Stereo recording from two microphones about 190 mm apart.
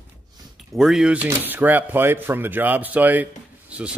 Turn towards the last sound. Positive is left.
turn(degrees=-5)  # may be behind; listen again after turning